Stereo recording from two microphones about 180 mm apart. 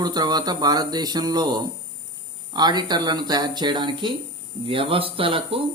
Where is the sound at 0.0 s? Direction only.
20° right (ahead or behind).